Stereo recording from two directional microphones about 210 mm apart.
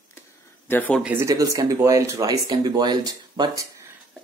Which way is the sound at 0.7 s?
10° left (ahead or behind).